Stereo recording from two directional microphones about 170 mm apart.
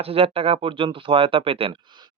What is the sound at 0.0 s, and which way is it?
Speech, 35° right (ahead or behind).